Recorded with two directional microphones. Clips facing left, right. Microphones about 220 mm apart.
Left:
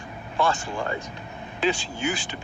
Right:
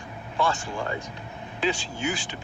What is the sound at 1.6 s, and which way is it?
Speech, 60° left (ahead or behind).